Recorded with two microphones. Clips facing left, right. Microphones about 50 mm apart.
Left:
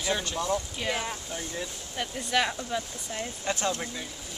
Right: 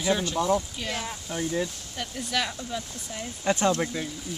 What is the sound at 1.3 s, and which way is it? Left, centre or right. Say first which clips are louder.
Speech: right 7 dB; centre.